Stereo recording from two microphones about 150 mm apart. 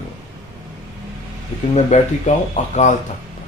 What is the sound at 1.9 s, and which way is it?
Speech, 50° left (ahead or behind).